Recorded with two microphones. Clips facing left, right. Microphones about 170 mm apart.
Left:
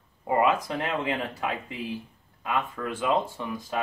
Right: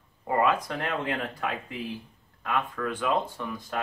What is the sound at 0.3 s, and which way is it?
Speech, 10° left (ahead or behind).